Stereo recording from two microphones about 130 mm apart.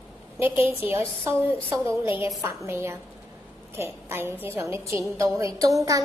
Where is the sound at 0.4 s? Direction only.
15° right (ahead or behind).